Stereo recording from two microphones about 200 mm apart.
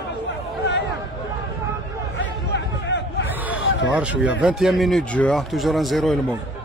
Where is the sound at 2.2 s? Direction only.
60° left (ahead or behind).